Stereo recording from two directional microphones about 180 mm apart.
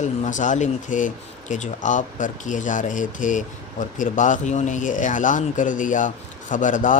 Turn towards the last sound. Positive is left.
turn(degrees=45)  # may be behind; listen again after turning